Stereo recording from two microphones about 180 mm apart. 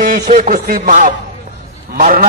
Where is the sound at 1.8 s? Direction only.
55° right (ahead or behind).